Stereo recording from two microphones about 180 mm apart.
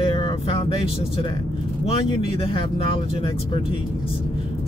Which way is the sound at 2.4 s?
30° left (ahead or behind).